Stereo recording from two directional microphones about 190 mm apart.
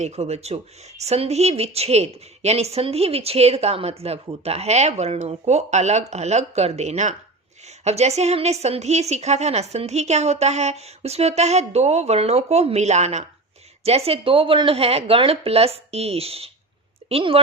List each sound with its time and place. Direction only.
0.0 s a woman's voice: 35° right (ahead or behind)